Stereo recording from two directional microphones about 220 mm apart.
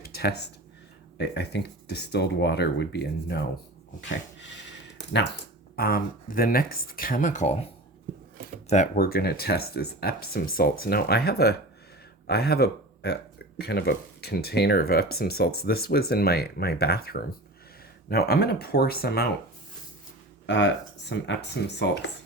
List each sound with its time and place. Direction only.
0.0 s a sound: 45° left (ahead or behind)
1.2 s speech: 50° left (ahead or behind)
5.7 s speech: 45° left (ahead or behind)
8.7 s speech: 35° left (ahead or behind)
20.5 s speech: 55° left (ahead or behind)